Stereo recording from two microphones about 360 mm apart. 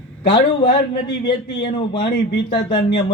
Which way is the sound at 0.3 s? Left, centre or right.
Centre.